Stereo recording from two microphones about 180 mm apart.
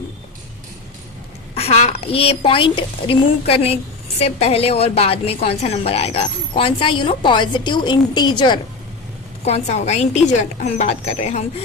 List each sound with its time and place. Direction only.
1.5 s a woman's voice: 35° left (ahead or behind)
9.4 s a woman's voice: 35° left (ahead or behind)